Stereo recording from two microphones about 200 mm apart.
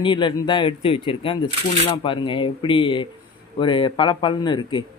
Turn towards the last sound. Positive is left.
turn(degrees=20)  # may be behind; listen again after turning